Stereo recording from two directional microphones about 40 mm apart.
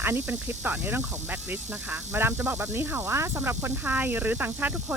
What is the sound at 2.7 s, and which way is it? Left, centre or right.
Speech, right.